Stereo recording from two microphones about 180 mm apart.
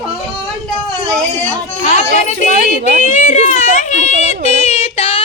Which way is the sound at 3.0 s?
45° left (ahead or behind).